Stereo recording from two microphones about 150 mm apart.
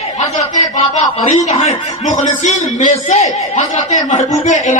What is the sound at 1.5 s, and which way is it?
A man's voice, 50° left (ahead or behind).